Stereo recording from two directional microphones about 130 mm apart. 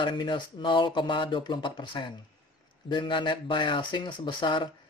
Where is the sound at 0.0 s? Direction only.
40° left (ahead or behind).